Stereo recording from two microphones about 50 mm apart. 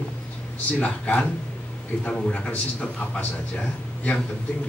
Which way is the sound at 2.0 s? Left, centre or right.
Left.